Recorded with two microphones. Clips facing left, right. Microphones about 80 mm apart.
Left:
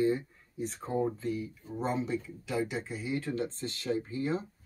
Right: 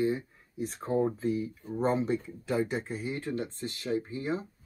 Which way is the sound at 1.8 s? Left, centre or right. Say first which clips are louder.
Right 4 dB; right.